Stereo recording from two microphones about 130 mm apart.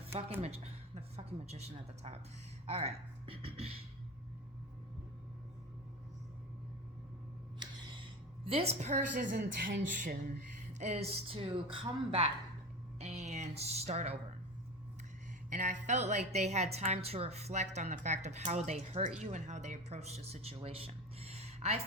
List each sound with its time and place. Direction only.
0.4 s speech: 55° right (ahead or behind)
7.6 s a sound: 35° right (ahead or behind)
8.4 s a woman's voice: 50° right (ahead or behind); by 10.3 s 85° right
10.8 s speech: 55° right (ahead or behind)
13.0 s a sound: 60° right (ahead or behind)
15.4 s a woman's voice: 70° right (ahead or behind); by 21.8 s 50° right (ahead or behind)